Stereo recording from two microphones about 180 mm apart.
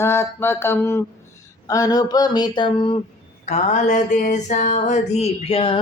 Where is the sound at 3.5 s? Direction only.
40° left (ahead or behind).